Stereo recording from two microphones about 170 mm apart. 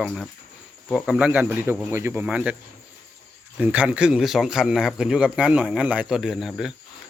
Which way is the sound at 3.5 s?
5° right (ahead or behind).